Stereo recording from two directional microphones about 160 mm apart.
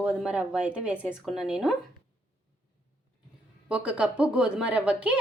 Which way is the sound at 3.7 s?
5° right (ahead or behind).